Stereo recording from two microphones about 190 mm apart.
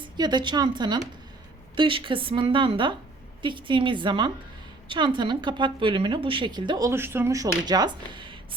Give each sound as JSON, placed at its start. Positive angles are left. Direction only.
{"t": 0.0, "sound": "speech", "side_deg": -25}